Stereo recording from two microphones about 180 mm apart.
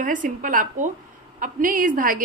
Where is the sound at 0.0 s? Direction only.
45° right (ahead or behind).